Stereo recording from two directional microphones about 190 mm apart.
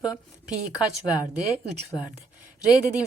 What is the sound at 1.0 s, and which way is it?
Speech, 20° left (ahead or behind).